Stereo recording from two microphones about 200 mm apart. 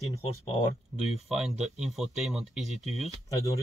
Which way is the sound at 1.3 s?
Centre (ahead or behind).